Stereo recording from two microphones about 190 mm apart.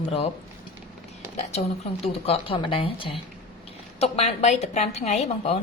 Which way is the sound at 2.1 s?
30° left (ahead or behind).